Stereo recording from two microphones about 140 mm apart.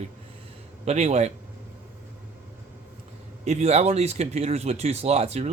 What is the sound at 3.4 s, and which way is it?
Speech, 50° right (ahead or behind).